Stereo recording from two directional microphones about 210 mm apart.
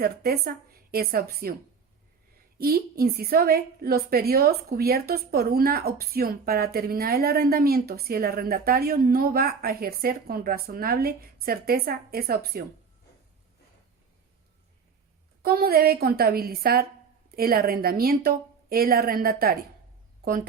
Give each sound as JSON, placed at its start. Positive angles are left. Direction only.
{"t": 0.0, "sound": "a woman's voice", "side_deg": -45}
{"t": 2.6, "sound": "a woman's voice", "side_deg": -45}
{"t": 15.4, "sound": "a woman's voice", "side_deg": -45}